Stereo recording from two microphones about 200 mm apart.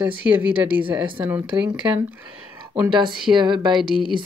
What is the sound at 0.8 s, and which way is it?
Speech, 25° right (ahead or behind).